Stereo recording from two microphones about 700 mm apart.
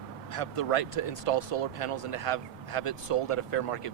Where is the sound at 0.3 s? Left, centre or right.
Left.